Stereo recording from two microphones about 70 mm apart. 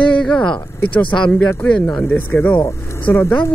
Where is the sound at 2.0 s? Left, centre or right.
Left.